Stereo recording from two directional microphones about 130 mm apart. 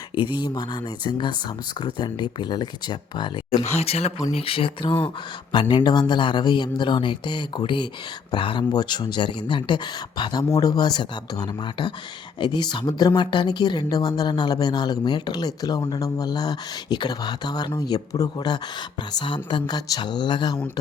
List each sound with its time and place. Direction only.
0.3 s speech: 35° left (ahead or behind)
3.8 s speech: 55° left (ahead or behind); by 20.6 s 35° left (ahead or behind)